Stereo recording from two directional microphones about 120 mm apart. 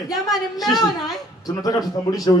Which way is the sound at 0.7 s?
30° left (ahead or behind).